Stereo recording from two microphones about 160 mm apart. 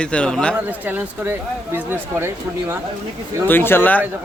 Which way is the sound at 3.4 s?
15° left (ahead or behind).